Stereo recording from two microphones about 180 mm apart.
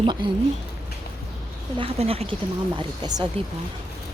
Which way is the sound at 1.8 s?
30° right (ahead or behind).